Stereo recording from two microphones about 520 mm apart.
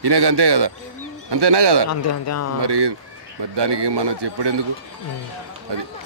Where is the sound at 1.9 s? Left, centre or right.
Left.